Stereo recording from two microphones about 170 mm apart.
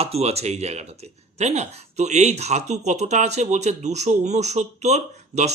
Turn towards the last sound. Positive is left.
turn(degrees=-40)  # may be behind; listen again after turning